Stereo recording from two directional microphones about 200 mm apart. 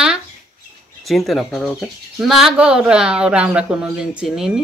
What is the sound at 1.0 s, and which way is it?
Speech, centre (ahead or behind).